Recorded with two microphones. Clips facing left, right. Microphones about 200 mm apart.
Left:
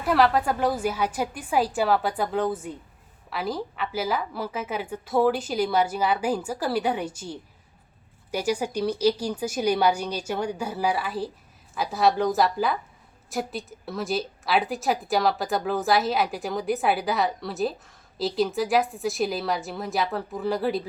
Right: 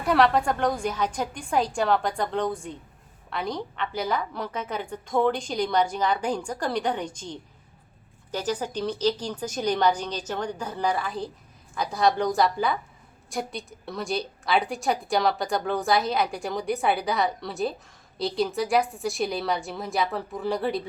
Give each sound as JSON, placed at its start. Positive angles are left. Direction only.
{"t": 0.0, "sound": "a woman's voice", "side_deg": 0}